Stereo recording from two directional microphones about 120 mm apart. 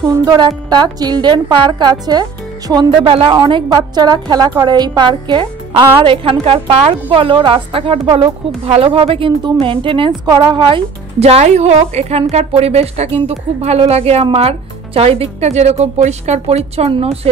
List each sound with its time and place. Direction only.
0.0 s a woman's voice: 30° right (ahead or behind)
11.1 s a woman's voice: 60° right (ahead or behind)